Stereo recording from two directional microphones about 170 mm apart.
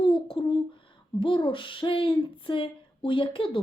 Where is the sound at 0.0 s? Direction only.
30° left (ahead or behind).